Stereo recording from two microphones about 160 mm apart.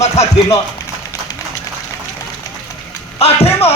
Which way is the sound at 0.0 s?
40° left (ahead or behind).